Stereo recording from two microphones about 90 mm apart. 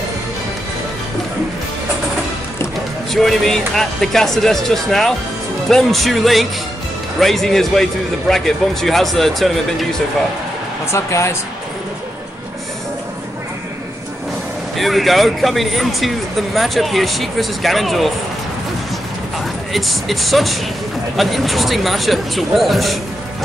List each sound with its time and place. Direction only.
3.1 s a man's voice: 5° left (ahead or behind)
10.9 s speech: 30° left (ahead or behind)
14.8 s a man's voice: centre (ahead or behind)
19.7 s a man's voice: centre (ahead or behind)